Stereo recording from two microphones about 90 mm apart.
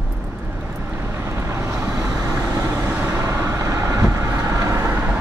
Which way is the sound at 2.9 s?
20° right (ahead or behind).